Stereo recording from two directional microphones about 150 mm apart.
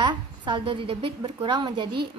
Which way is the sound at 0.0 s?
30° right (ahead or behind).